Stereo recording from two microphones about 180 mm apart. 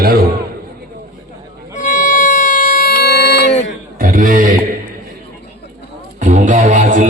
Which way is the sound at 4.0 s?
50° right (ahead or behind).